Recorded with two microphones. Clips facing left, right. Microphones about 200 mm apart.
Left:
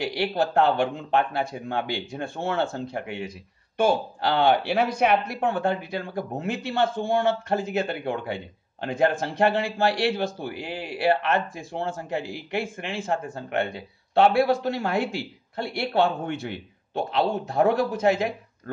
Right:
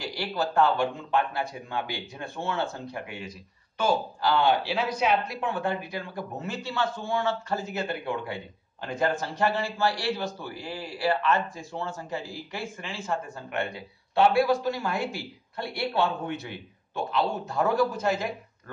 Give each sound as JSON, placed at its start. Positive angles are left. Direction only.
{"t": 0.0, "sound": "speech", "side_deg": 65}
{"t": 8.8, "sound": "speech", "side_deg": 65}